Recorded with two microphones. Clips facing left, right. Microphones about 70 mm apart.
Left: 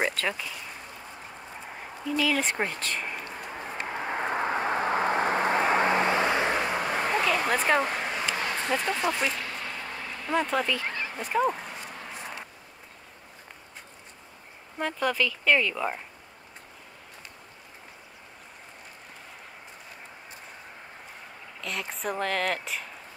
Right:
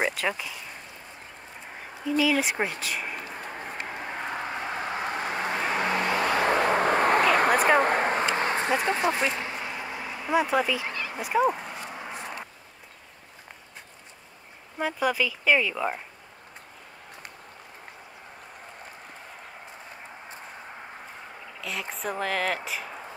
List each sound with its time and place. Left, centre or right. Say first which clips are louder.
0.0 s speech: right 1 dB; centre
2.0 s speech: right 3 dB; centre
3.7 s vehicle: left 6 dB; left
6.4 s vehicle: right 4 dB; right
6.8 s vehicle: right 5 dB; right
7.5 s speech: right 3 dB; centre
7.8 s a sound: right 6 dB; right
8.8 s speech: right 3 dB; right
9.3 s a sound: right 2 dB; right
14.8 s speech: right 1 dB; centre
21.5 s speech: even; centre